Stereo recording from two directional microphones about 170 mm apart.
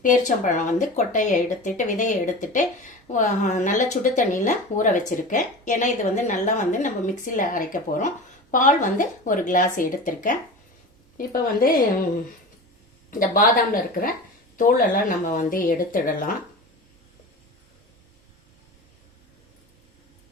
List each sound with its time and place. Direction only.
0.0 s a woman's voice: 50° left (ahead or behind)
13.1 s a woman's voice: 55° left (ahead or behind)